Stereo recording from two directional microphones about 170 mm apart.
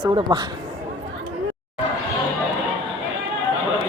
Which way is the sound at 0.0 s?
20° right (ahead or behind).